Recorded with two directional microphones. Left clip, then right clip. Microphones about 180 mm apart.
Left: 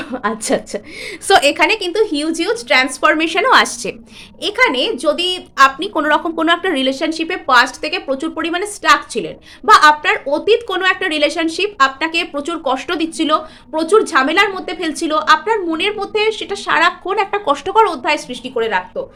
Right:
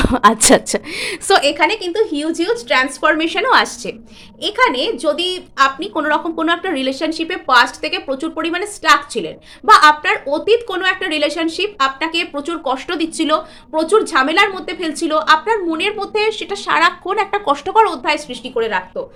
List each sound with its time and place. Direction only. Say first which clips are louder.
0.0 s a woman's voice: right 9 dB; 40° right (ahead or behind)
1.3 s a woman's voice: left 2 dB; 15° left (ahead or behind)